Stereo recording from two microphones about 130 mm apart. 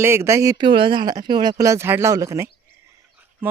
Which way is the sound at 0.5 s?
40° right (ahead or behind).